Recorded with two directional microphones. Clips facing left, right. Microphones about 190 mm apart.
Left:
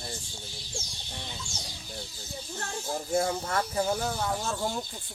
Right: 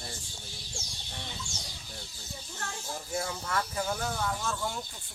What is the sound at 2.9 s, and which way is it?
Speech, 35° left (ahead or behind).